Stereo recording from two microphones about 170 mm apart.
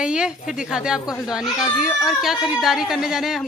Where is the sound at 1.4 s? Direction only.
25° left (ahead or behind).